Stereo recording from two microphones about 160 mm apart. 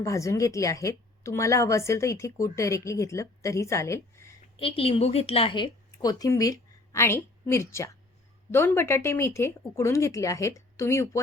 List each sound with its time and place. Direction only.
0.0 s speech: 20° left (ahead or behind)
4.5 s a woman's voice: 35° left (ahead or behind); by 11.2 s 15° left (ahead or behind)